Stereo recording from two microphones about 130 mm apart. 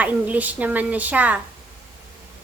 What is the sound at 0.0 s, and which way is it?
A woman's voice, 10° right (ahead or behind).